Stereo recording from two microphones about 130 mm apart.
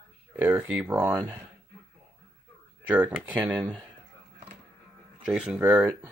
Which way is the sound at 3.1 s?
10° right (ahead or behind).